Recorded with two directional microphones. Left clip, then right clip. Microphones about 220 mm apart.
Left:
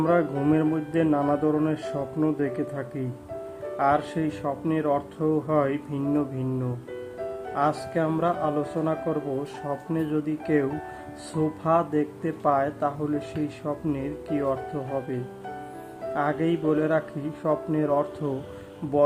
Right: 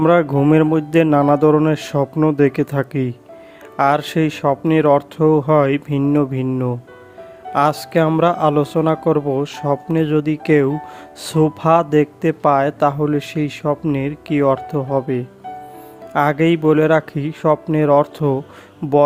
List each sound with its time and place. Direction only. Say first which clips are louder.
0.0 s speech: right 9 dB; 40° right (ahead or behind)